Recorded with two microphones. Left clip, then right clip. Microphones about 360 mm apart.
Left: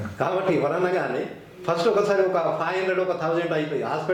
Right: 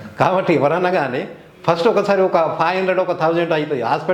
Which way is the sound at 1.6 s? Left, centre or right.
Right.